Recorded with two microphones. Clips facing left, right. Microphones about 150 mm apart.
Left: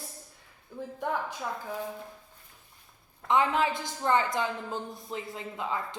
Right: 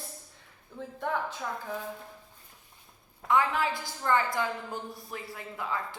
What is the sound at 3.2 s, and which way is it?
A woman's voice, 20° left (ahead or behind).